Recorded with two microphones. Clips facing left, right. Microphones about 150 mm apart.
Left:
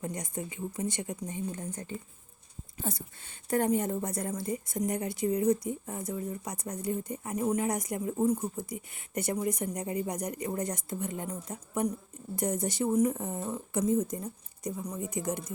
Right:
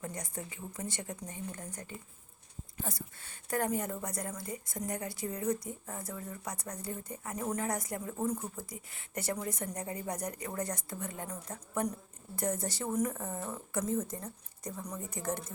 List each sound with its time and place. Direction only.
0.0 s a woman's voice: 20° left (ahead or behind)